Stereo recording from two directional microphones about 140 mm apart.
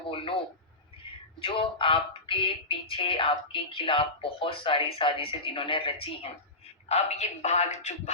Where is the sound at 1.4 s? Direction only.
40° left (ahead or behind).